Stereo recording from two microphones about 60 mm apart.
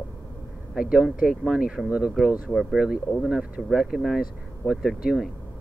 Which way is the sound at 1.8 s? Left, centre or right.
Centre.